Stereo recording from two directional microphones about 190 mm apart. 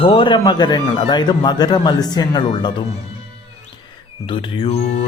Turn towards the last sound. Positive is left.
turn(degrees=30)  # may be behind; listen again after turning